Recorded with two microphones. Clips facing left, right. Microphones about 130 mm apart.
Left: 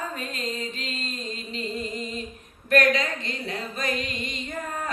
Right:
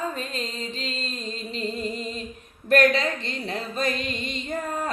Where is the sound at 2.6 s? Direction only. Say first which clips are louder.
Right 2 dB; 30° right (ahead or behind).